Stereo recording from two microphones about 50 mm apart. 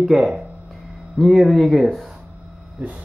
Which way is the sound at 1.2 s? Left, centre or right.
Centre.